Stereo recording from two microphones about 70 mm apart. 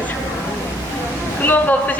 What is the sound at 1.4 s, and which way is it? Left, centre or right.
Speech, left.